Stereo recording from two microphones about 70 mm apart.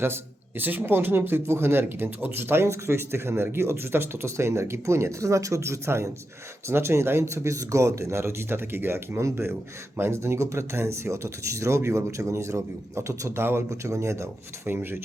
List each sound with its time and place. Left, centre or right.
0.6 s speech: right
13.7 s speech: right